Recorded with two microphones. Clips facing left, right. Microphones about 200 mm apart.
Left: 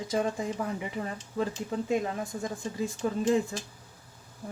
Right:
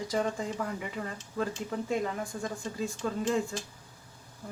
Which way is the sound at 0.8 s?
20° left (ahead or behind).